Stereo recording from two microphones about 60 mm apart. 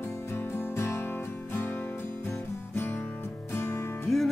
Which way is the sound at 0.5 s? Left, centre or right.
Left.